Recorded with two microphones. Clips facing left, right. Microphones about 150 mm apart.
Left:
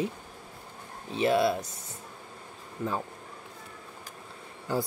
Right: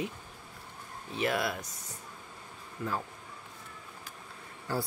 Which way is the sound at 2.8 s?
30° left (ahead or behind).